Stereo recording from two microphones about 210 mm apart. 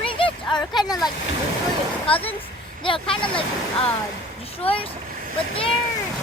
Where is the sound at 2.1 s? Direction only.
25° left (ahead or behind).